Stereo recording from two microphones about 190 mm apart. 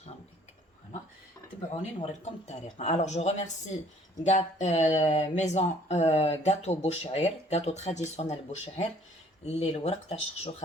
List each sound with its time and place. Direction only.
1.7 s speech: 35° left (ahead or behind)